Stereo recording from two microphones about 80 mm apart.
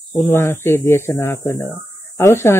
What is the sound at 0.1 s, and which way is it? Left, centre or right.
Speech, left.